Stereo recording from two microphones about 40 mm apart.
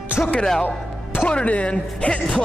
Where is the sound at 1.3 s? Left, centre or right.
Left.